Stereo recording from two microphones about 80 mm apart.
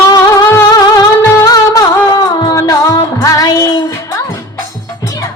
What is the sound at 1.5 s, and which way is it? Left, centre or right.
Music, left.